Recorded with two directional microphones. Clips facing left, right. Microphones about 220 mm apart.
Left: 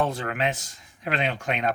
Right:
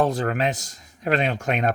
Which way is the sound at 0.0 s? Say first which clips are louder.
Right 4 dB; 40° right (ahead or behind).